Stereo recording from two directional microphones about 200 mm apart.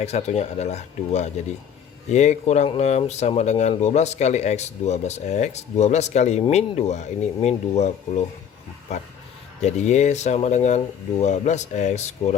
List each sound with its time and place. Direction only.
0.0 s speech: 30° left (ahead or behind)
9.6 s speech: 35° left (ahead or behind)